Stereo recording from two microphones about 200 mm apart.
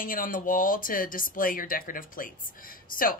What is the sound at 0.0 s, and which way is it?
Speech, 45° left (ahead or behind).